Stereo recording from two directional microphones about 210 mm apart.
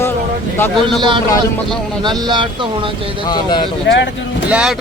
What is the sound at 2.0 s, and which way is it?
Speech, 20° right (ahead or behind).